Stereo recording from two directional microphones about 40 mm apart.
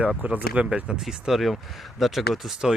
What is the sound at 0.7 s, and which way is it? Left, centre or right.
Speech, right.